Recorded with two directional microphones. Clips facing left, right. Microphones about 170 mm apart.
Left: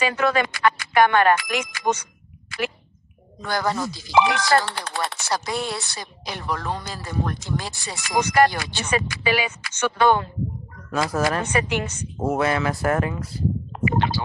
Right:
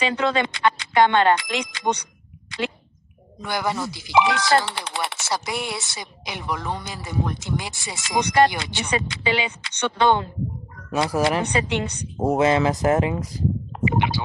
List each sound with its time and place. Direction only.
0.0 s speech: 25° right (ahead or behind)
3.4 s chopping: 15° right (ahead or behind)
11.5 s speech: 20° right (ahead or behind)